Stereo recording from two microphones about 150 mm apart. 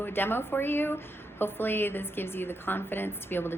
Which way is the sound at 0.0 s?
15° left (ahead or behind).